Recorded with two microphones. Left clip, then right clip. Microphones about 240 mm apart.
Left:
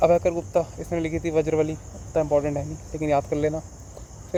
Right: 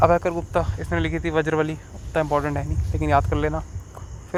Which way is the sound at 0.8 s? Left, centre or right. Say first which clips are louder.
Right 2 dB; right.